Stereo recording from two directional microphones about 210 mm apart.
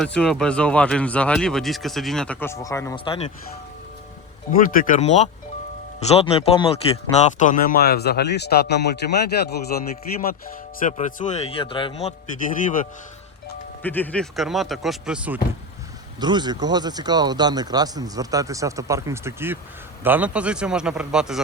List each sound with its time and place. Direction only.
0.0 s speech: 5° left (ahead or behind); by 3.3 s 25° left (ahead or behind)
4.5 s a man's voice: 40° left (ahead or behind)
13.8 s speech: 10° left (ahead or behind)
16.2 s speech: 20° right (ahead or behind); by 21.4 s 5° right (ahead or behind)